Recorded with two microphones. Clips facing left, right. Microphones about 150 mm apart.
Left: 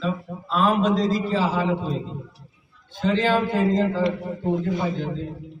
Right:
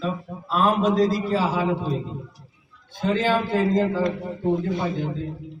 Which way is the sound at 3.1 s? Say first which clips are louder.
Left 1 dB; 5° right (ahead or behind).